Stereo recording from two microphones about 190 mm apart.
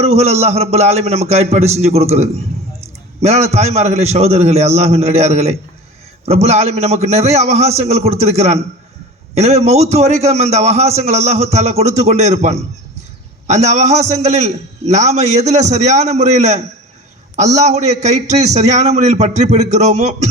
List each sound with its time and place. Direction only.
0.0 s a man's voice: 35° right (ahead or behind)